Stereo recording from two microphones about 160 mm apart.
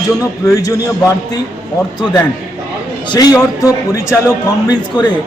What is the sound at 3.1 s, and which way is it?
A man's voice, 25° left (ahead or behind).